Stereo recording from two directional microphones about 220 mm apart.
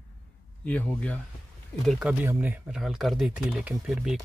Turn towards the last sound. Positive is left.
turn(degrees=0)  # may be behind; listen again after turning